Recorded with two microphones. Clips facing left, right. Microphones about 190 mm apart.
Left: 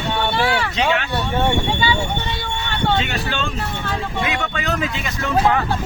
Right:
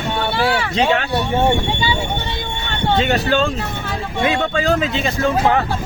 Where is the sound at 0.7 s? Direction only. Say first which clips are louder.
Right 3 dB; 35° right (ahead or behind).